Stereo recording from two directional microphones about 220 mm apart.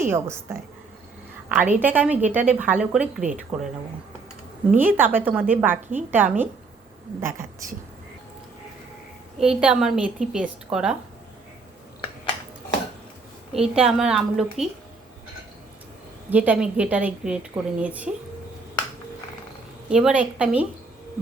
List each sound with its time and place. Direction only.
0.0 s a woman's voice: 10° right (ahead or behind)
1.5 s a woman's voice: 5° right (ahead or behind)
4.8 s a woman's voice: 10° right (ahead or behind)
7.3 s a woman's voice: 40° right (ahead or behind)
9.4 s a woman's voice: 5° right (ahead or behind)
13.5 s a woman's voice: 5° right (ahead or behind)
16.3 s a woman's voice: 5° right (ahead or behind)
19.9 s a woman's voice: 5° right (ahead or behind)